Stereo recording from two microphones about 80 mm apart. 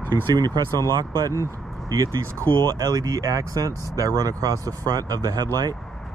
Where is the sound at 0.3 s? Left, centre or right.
Right.